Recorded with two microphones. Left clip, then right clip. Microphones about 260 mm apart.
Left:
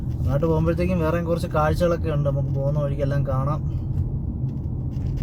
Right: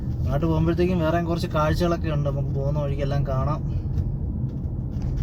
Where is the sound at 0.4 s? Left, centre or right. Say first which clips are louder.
Left 1 dB; centre.